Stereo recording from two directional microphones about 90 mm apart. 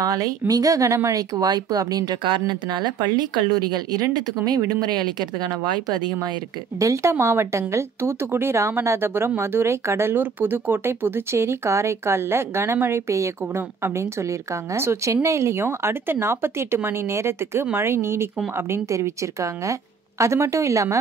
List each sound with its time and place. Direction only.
0.0 s a woman's voice: 40° right (ahead or behind)
2.2 s speech: 60° right (ahead or behind)
6.8 s a woman's voice: 35° right (ahead or behind)